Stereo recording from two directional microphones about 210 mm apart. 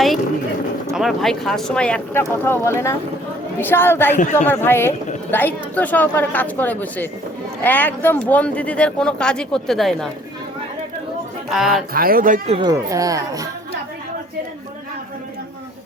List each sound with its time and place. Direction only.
0.9 s a woman's voice: centre (ahead or behind)
4.1 s a man's voice: 35° left (ahead or behind)
4.4 s a woman's voice: 10° left (ahead or behind)
11.4 s speech: centre (ahead or behind)
11.9 s speech: 45° right (ahead or behind)
12.5 s speech: 15° right (ahead or behind)